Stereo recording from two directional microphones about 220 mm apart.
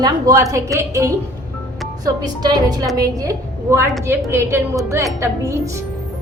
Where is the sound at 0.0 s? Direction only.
15° right (ahead or behind).